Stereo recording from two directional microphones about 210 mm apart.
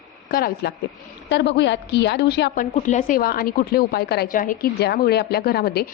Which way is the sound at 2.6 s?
35° left (ahead or behind).